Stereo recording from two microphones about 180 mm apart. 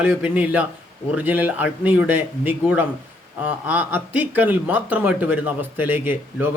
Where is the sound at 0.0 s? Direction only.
10° right (ahead or behind).